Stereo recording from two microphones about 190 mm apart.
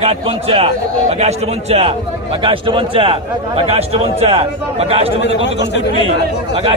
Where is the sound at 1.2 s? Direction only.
35° right (ahead or behind).